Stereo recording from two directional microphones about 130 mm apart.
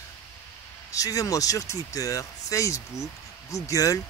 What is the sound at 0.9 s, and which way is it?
Speech, 25° left (ahead or behind).